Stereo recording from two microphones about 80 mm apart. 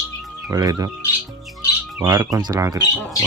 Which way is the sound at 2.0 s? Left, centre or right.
Right.